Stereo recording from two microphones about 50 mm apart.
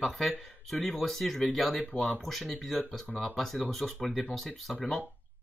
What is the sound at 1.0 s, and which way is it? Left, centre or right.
Speech, centre.